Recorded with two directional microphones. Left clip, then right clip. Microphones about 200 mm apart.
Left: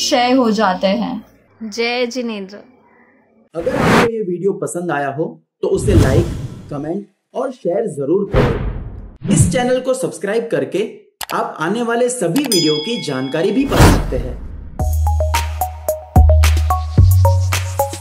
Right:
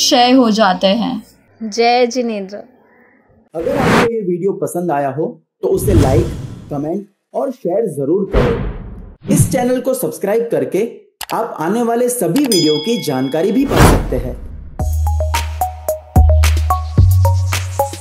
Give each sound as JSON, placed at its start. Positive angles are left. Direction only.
{"t": 0.0, "sound": "speech", "side_deg": -20}
{"t": 1.7, "sound": "a woman's voice", "side_deg": -10}
{"t": 3.5, "sound": "plop", "side_deg": 0}
{"t": 4.6, "sound": "speech", "side_deg": -25}
{"t": 5.9, "sound": "speech", "side_deg": 0}
{"t": 6.8, "sound": "speech", "side_deg": -25}
{"t": 8.3, "sound": "plop", "side_deg": 0}
{"t": 9.3, "sound": "speech", "side_deg": -30}
{"t": 12.3, "sound": "plop", "side_deg": 0}
{"t": 12.8, "sound": "speech", "side_deg": -30}
{"t": 14.8, "sound": "music", "side_deg": 0}